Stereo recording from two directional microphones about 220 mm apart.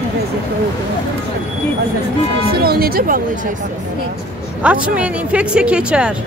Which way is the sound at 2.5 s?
45° right (ahead or behind).